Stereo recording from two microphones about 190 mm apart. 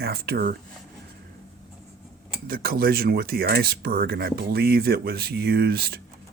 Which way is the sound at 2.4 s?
50° right (ahead or behind).